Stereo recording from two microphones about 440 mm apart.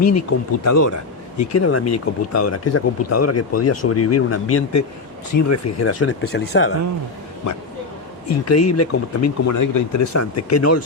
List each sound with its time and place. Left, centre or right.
0.0 s speech: left
7.5 s speech: left